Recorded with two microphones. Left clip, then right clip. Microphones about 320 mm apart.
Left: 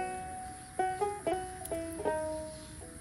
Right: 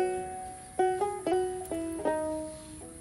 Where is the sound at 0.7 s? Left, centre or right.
Right.